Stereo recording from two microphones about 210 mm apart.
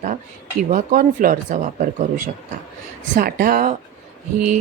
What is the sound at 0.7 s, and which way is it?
Speech, 40° right (ahead or behind).